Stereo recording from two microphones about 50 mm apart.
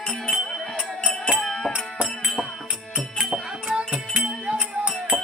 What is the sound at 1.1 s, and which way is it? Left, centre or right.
Music, centre.